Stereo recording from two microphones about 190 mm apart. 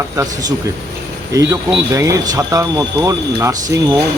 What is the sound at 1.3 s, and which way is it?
Speech, 15° right (ahead or behind).